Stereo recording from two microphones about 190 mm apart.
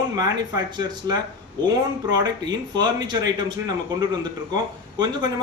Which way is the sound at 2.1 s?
20° right (ahead or behind).